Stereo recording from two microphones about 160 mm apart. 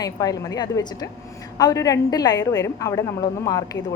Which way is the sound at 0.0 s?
25° left (ahead or behind).